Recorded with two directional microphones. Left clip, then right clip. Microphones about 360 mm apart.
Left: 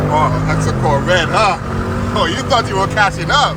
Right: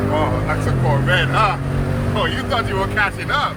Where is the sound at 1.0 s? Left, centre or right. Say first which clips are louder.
Left 3 dB; centre.